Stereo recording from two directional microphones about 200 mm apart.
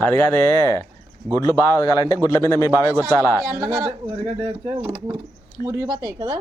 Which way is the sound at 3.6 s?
15° right (ahead or behind).